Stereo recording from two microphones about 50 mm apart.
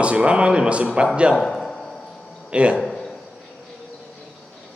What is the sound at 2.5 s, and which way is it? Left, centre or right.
Speech, right.